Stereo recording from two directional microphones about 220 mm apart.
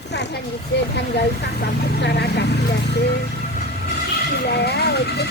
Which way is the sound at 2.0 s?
50° left (ahead or behind).